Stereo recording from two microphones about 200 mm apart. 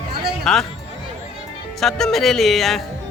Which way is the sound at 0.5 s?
Centre (ahead or behind).